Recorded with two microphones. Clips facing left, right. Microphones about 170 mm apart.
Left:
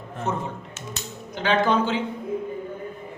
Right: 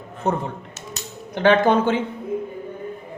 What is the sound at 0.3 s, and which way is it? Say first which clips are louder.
A man's voice: right 5 dB; 60° right (ahead or behind).